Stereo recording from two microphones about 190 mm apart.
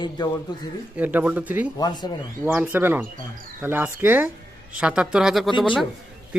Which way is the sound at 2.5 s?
10° right (ahead or behind).